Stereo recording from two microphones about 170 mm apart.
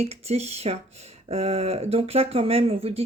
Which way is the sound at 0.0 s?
40° right (ahead or behind).